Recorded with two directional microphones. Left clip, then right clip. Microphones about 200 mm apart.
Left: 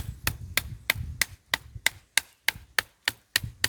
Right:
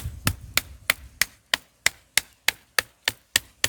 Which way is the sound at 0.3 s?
10° right (ahead or behind).